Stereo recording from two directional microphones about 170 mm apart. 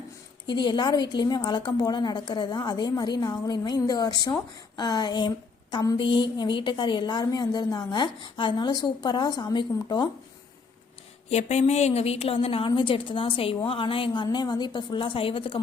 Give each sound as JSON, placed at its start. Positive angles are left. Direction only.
{"t": 0.4, "sound": "a woman's voice", "side_deg": 25}
{"t": 11.3, "sound": "a woman's voice", "side_deg": 40}